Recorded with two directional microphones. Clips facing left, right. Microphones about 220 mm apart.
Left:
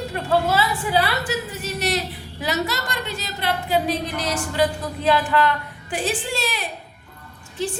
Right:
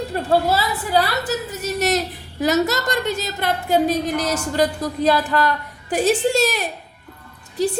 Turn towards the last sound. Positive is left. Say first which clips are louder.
# right 6 dB
turn(degrees=-40)  # may be behind; listen again after turning